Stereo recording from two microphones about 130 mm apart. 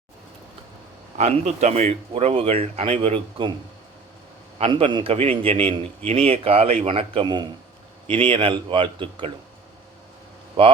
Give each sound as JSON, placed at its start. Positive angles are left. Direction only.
{"t": 1.2, "sound": "speech", "side_deg": -65}
{"t": 4.5, "sound": "speech", "side_deg": -50}
{"t": 10.6, "sound": "speech", "side_deg": -45}